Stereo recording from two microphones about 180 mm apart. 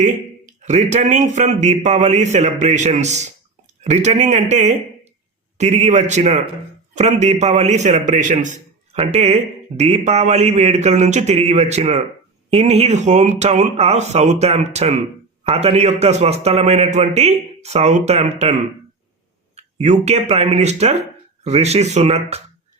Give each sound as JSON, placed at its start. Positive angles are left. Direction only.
{"t": 0.0, "sound": "a man's voice", "side_deg": -40}
{"t": 19.5, "sound": "a man's voice", "side_deg": -35}